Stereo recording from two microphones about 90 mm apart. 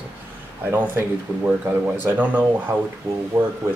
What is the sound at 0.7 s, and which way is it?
Speech, 25° right (ahead or behind).